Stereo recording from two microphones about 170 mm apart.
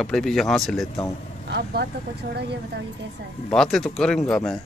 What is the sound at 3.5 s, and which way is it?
Speech, 5° left (ahead or behind).